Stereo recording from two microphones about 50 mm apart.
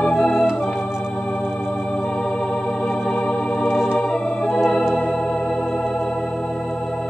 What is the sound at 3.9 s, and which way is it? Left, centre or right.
Organ, centre.